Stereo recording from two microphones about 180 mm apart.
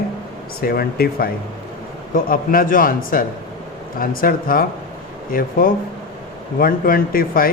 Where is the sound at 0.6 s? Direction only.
55° left (ahead or behind).